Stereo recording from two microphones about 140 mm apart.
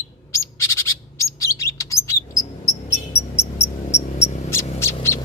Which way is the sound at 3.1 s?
20° left (ahead or behind).